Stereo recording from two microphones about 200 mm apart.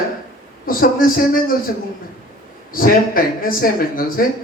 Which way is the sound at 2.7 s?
45° left (ahead or behind).